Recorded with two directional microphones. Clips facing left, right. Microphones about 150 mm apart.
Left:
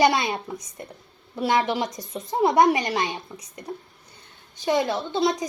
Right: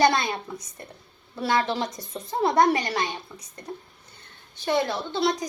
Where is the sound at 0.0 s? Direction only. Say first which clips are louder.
Left 1 dB; 10° left (ahead or behind).